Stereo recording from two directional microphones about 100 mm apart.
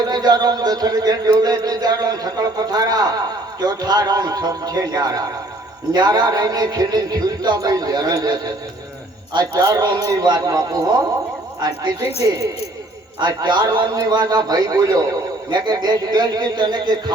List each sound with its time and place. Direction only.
0.1 s a man's voice: 40° right (ahead or behind)
13.1 s a man's voice: 50° right (ahead or behind)